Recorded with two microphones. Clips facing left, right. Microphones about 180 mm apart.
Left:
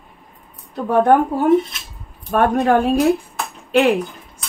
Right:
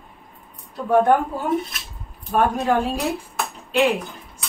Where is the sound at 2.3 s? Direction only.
65° left (ahead or behind).